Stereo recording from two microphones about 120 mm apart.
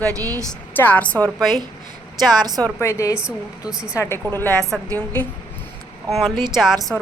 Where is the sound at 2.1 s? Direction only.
35° right (ahead or behind).